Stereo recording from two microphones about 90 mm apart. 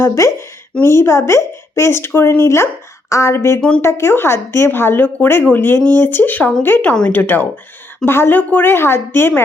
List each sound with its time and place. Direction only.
0.0 s speech: 30° left (ahead or behind)